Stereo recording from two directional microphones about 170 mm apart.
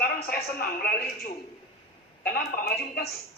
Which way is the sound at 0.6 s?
60° left (ahead or behind).